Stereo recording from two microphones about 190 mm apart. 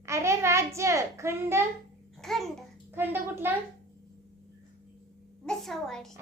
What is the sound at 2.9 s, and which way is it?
Speech, 10° right (ahead or behind).